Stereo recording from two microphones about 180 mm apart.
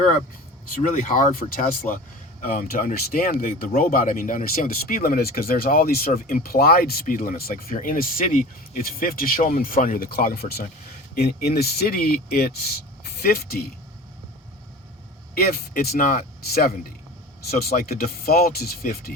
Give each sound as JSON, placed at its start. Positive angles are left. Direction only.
{"t": 0.7, "sound": "speech", "side_deg": 50}
{"t": 15.4, "sound": "speech", "side_deg": 55}